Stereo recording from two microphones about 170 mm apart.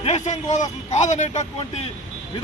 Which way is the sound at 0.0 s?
45° left (ahead or behind).